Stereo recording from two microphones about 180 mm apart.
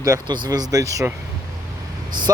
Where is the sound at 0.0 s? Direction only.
15° right (ahead or behind).